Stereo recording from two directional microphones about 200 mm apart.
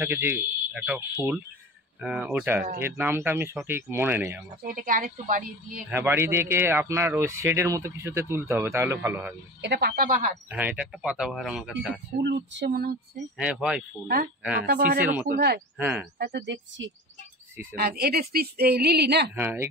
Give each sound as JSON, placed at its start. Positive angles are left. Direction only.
{"t": 0.0, "sound": "speech", "side_deg": -10}
{"t": 4.6, "sound": "speech", "side_deg": -45}
{"t": 5.9, "sound": "speech", "side_deg": -10}
{"t": 9.6, "sound": "speech", "side_deg": -55}
{"t": 10.5, "sound": "speech", "side_deg": -5}
{"t": 12.2, "sound": "speech", "side_deg": -60}
{"t": 13.4, "sound": "speech", "side_deg": -5}
{"t": 14.6, "sound": "speech", "side_deg": -50}
{"t": 15.0, "sound": "speech", "side_deg": -10}
{"t": 15.2, "sound": "speech", "side_deg": -50}
{"t": 15.8, "sound": "speech", "side_deg": -10}
{"t": 16.3, "sound": "speech", "side_deg": -65}
{"t": 17.7, "sound": "speech", "side_deg": -55}
{"t": 19.3, "sound": "speech", "side_deg": -10}